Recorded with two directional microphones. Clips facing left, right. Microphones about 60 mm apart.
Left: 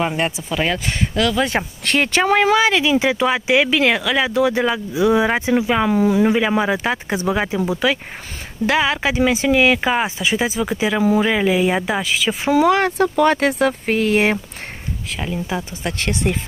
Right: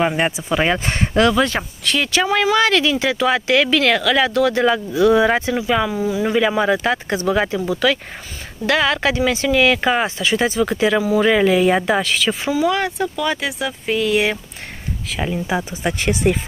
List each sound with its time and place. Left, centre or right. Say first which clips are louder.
0.0 s speech: right 2 dB; centre
0.8 s speech: right 3 dB; right
1.5 s speech: left 2 dB; left
1.9 s speech: left 2 dB; left
2.5 s speech: left 1 dB; centre
5.9 s speech: left 5 dB; left
6.2 s speech: even; centre
9.8 s speech: right 1 dB; centre
12.4 s speech: left 6 dB; left
15.1 s speech: right 3 dB; centre